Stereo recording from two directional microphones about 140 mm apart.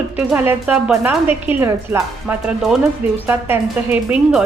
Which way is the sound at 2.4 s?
5° right (ahead or behind).